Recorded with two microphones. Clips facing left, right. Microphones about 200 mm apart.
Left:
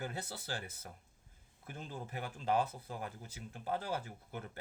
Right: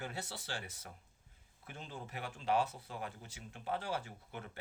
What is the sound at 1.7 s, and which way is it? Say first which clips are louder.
Speech: left 2 dB; 40° left (ahead or behind).